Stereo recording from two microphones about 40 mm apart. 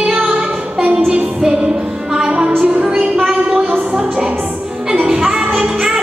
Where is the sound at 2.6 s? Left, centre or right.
Right.